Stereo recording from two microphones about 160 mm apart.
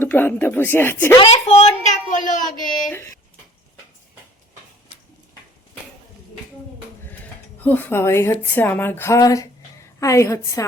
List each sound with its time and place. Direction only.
0.0 s a woman's voice: 10° left (ahead or behind)
1.2 s a woman's voice: 40° left (ahead or behind); by 2.9 s 55° left (ahead or behind)
7.6 s a woman's voice: 10° left (ahead or behind)